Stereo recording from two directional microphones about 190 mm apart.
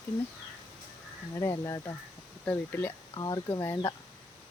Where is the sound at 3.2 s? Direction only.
20° left (ahead or behind).